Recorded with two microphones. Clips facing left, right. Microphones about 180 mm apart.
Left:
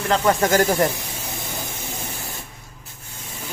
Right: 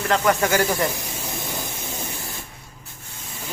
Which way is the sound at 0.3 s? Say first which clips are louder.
Left 3 dB; 35° left (ahead or behind).